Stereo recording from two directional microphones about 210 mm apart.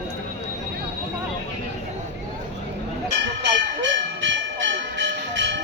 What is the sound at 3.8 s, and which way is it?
Bell, 60° right (ahead or behind).